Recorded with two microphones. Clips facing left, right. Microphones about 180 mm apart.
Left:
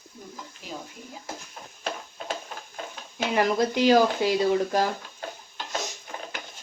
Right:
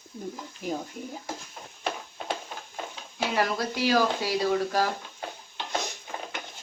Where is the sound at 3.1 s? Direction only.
20° left (ahead or behind).